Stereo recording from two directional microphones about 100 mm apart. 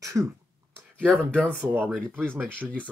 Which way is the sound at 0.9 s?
10° left (ahead or behind).